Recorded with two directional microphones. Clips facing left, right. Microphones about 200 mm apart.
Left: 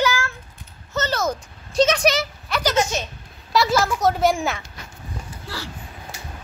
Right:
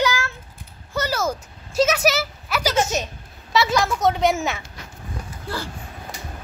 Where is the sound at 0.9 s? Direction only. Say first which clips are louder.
Even; 10° right (ahead or behind).